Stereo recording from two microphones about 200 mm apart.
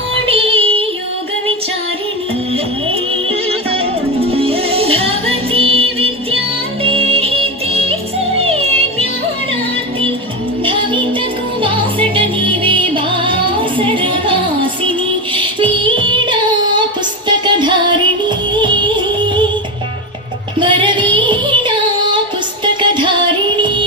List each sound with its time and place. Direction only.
0.3 s yodeling: 30° right (ahead or behind)
2.5 s music: 30° right (ahead or behind)
10.6 s music: 25° right (ahead or behind)
15.8 s music: 25° right (ahead or behind)
20.6 s music: 25° right (ahead or behind)